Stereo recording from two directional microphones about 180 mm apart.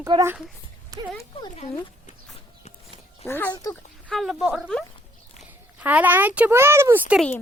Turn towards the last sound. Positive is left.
turn(degrees=5)  # may be behind; listen again after turning